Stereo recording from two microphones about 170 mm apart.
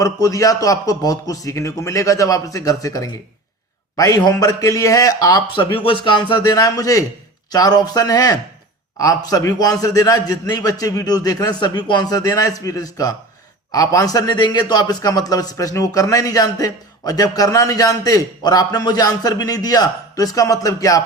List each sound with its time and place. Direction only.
0.0 s a man's voice: 20° left (ahead or behind)